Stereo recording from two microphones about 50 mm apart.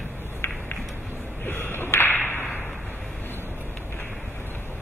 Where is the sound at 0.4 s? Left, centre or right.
Left.